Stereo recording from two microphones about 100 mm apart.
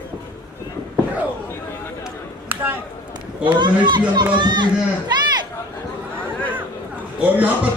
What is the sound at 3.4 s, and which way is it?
Speech, 50° right (ahead or behind).